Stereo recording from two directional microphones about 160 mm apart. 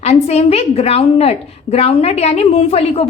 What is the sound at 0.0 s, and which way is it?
A woman's voice, 40° left (ahead or behind).